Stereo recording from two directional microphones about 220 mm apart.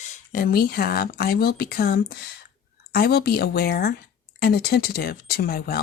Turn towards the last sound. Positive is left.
turn(degrees=45)  # may be behind; listen again after turning